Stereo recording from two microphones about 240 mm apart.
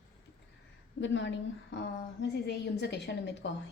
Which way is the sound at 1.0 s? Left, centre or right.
Left.